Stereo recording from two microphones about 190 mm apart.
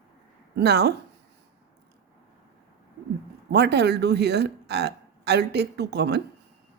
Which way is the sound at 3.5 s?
60° right (ahead or behind).